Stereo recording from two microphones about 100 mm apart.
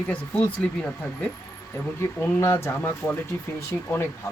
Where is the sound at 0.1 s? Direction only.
15° left (ahead or behind).